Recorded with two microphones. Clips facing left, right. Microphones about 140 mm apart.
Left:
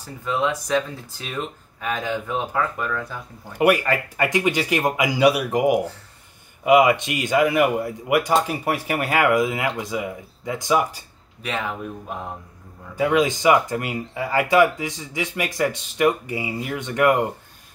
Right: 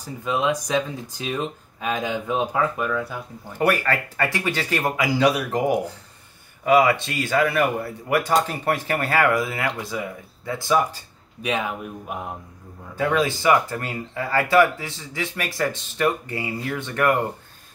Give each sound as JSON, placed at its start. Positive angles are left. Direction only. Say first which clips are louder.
{"t": 0.0, "sound": "speech", "louder": "even", "side_deg": -15}
{"t": 3.5, "sound": "speech", "louder": "left 3 dB", "side_deg": 15}
{"t": 11.4, "sound": "speech", "louder": "right 2 dB", "side_deg": -15}
{"t": 12.9, "sound": "speech", "louder": "left 2 dB", "side_deg": 15}